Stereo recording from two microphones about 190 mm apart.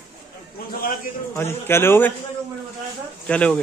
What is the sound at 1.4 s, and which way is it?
Speech, 10° left (ahead or behind).